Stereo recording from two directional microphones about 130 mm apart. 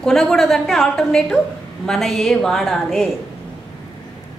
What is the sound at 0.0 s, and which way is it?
A woman's voice, 5° left (ahead or behind).